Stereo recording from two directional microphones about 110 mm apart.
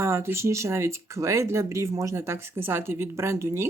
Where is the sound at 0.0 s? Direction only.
25° right (ahead or behind).